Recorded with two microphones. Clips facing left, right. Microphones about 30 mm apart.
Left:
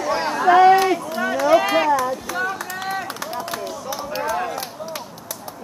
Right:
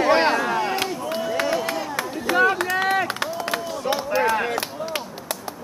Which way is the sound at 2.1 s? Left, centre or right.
Right.